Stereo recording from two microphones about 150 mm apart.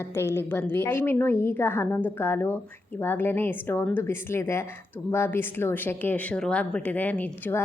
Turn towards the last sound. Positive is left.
turn(degrees=15)  # may be behind; listen again after turning